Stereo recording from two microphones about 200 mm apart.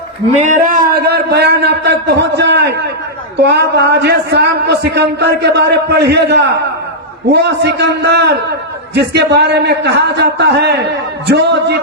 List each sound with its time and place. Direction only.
0.4 s a man's voice: 40° right (ahead or behind); by 11.8 s 55° right (ahead or behind)